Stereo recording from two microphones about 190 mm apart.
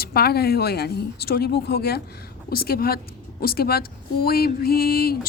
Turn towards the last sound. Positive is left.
turn(degrees=55)  # may be behind; listen again after turning